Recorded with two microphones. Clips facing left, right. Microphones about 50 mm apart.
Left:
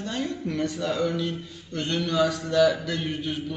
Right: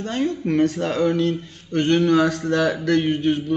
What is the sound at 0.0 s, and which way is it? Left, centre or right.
Speech, right.